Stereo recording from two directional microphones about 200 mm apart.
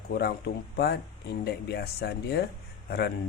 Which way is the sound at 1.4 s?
55° left (ahead or behind).